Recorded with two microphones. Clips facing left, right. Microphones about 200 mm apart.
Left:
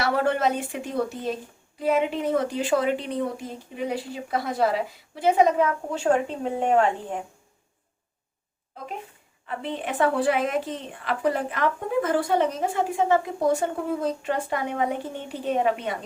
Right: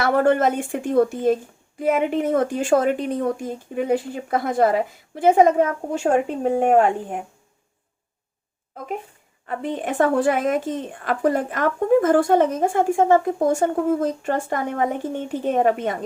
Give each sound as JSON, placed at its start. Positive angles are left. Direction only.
{"t": 0.0, "sound": "a woman's voice", "side_deg": -50}
{"t": 9.5, "sound": "a woman's voice", "side_deg": -45}